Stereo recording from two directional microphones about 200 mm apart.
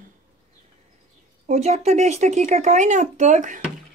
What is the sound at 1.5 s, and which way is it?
Speech, 35° right (ahead or behind).